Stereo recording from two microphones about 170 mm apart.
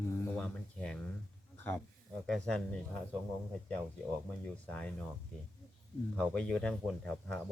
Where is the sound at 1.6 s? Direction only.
10° left (ahead or behind).